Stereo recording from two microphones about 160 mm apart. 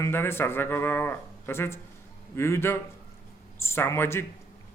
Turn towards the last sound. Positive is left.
turn(degrees=15)  # may be behind; listen again after turning